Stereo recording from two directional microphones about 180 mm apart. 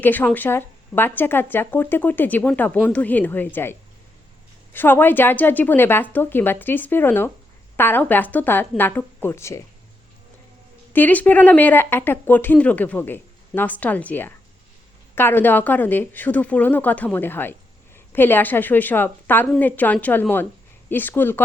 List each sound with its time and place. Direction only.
0.0 s speech: 10° left (ahead or behind)
10.9 s speech: 10° left (ahead or behind)